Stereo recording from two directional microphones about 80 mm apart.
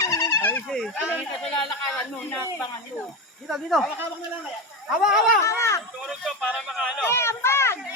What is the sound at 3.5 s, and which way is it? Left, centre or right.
Speech, centre.